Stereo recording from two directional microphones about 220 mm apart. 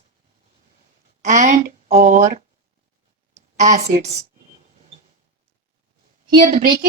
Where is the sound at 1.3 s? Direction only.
30° right (ahead or behind).